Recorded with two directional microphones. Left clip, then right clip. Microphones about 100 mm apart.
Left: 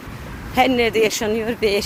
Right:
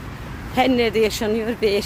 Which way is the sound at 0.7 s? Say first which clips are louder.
Left 1 dB; 15° right (ahead or behind).